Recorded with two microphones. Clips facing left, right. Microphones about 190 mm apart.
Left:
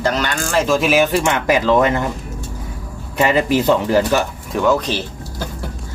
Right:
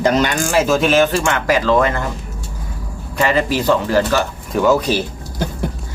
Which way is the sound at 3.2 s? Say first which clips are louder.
Left 2 dB; 20° left (ahead or behind).